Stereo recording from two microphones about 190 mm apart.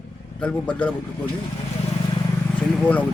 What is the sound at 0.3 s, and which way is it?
Speech, 5° left (ahead or behind).